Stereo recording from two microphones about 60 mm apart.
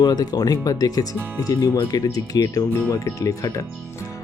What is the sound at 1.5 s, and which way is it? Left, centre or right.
Speech, left.